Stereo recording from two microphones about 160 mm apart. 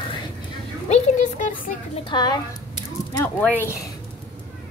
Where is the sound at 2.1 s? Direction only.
25° left (ahead or behind).